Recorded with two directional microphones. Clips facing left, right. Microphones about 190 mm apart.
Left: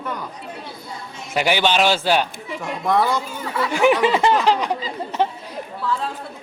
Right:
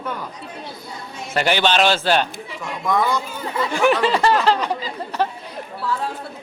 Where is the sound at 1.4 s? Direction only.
10° left (ahead or behind).